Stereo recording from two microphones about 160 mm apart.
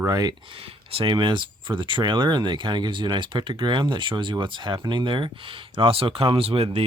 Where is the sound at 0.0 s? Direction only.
25° right (ahead or behind).